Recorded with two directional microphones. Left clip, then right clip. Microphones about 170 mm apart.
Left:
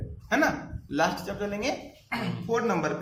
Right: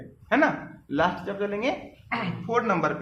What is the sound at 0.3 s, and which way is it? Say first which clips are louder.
Speech: right 3 dB; 40° right (ahead or behind).